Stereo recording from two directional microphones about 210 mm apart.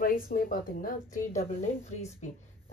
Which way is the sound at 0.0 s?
45° left (ahead or behind).